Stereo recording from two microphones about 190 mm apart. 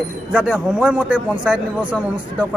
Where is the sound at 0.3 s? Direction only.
5° right (ahead or behind).